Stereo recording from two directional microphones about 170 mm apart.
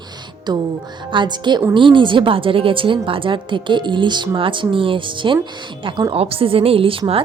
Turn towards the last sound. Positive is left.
turn(degrees=-30)  # may be behind; listen again after turning